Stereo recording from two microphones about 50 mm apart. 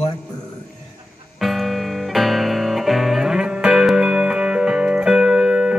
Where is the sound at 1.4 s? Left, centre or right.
Centre.